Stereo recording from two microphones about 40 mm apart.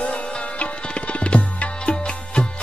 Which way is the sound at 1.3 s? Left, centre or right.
Left.